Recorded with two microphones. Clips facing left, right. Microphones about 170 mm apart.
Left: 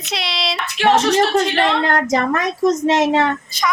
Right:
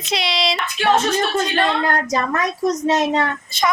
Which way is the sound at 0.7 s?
90° left.